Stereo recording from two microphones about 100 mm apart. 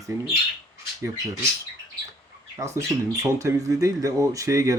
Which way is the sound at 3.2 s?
30° right (ahead or behind).